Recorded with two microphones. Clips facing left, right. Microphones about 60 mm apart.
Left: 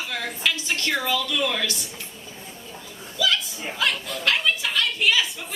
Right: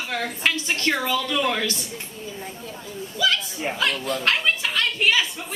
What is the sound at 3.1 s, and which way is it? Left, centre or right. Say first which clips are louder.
Chuckle: right 1 dB; right.